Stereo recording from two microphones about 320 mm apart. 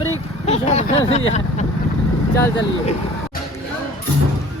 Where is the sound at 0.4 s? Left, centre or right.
Centre.